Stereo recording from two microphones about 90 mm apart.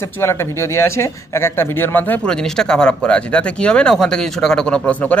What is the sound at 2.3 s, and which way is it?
A man's voice, 5° left (ahead or behind).